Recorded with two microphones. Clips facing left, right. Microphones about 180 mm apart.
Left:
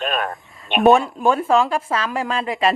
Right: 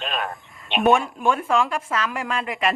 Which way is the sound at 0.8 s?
35° left (ahead or behind).